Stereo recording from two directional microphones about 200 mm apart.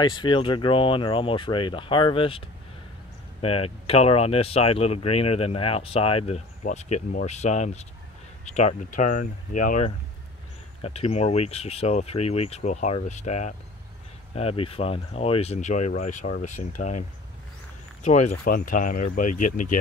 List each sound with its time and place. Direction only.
0.0 s speech: 20° left (ahead or behind); by 17.0 s 35° left (ahead or behind)
18.0 s speech: 35° left (ahead or behind)